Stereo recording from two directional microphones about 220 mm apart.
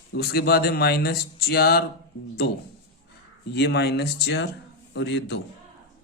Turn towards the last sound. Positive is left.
turn(degrees=50)  # may be behind; listen again after turning